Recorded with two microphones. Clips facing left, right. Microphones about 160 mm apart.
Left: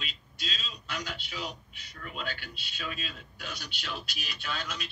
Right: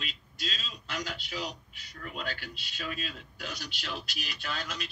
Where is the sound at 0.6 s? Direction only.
45° right (ahead or behind).